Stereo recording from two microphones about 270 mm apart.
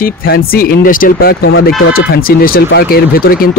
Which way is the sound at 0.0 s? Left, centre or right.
Left.